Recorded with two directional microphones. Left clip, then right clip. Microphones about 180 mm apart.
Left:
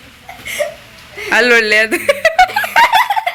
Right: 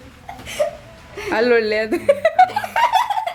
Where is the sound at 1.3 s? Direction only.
Centre (ahead or behind).